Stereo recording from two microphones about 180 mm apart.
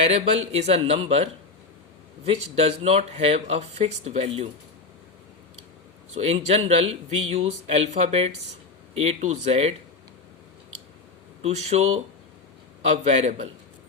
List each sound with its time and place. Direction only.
0.0 s speech: 35° right (ahead or behind)
6.1 s speech: 35° right (ahead or behind)
11.4 s speech: 35° right (ahead or behind)